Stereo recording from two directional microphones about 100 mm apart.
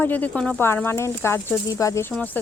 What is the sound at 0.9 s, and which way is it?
Speech, 25° left (ahead or behind).